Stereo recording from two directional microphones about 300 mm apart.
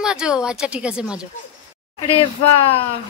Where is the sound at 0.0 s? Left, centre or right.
Centre.